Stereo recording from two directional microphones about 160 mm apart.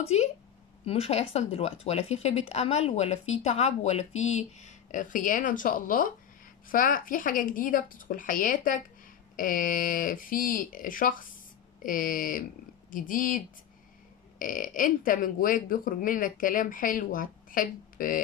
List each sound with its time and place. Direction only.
0.0 s speech: 40° left (ahead or behind); by 13.4 s 55° left (ahead or behind)
14.4 s speech: 55° left (ahead or behind)